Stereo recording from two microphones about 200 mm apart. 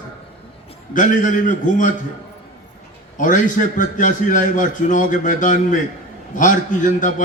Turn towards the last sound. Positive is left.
turn(degrees=40)  # may be behind; listen again after turning